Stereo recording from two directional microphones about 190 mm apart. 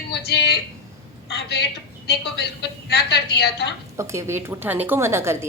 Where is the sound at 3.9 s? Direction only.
15° right (ahead or behind).